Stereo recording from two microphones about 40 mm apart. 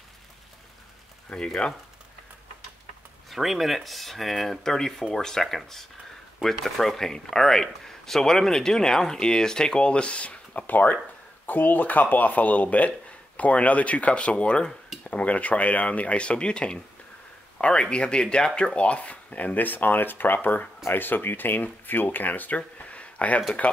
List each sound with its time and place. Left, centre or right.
1.3 s speech: centre
3.3 s speech: centre
18.8 s speech: left
22.8 s a sound: left
23.6 s speech: left